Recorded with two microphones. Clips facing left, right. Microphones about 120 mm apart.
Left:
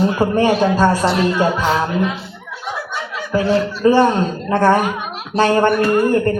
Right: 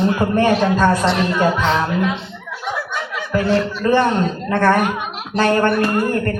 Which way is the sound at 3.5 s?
Centre (ahead or behind).